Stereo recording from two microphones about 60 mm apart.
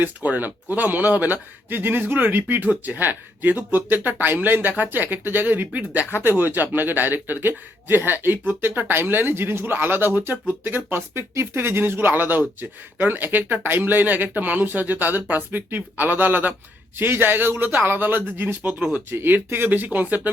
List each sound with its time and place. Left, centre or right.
0.0 s a man's voice: right
18.8 s speech: centre
19.1 s a man's voice: right